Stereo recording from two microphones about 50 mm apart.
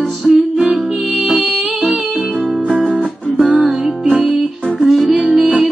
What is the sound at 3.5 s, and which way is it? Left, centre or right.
Music, right.